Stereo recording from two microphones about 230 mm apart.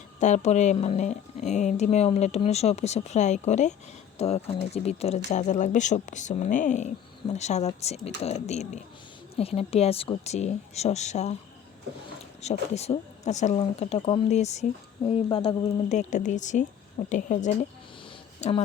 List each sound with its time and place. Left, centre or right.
0.2 s speech: left
12.4 s a woman's voice: left